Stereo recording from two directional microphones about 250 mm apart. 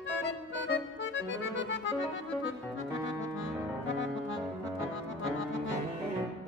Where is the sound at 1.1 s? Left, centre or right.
Left.